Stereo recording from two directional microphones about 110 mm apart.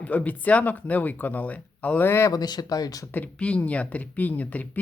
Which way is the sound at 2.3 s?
35° left (ahead or behind).